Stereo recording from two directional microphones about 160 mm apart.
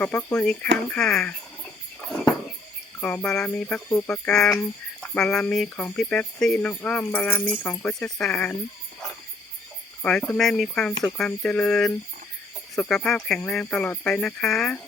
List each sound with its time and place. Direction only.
0.0 s speech: 5° left (ahead or behind)
0.9 s a sound: 5° left (ahead or behind)
3.0 s speech: 10° left (ahead or behind)
10.0 s speech: 5° left (ahead or behind)